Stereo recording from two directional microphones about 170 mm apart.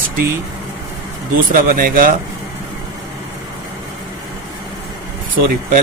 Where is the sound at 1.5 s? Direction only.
55° right (ahead or behind).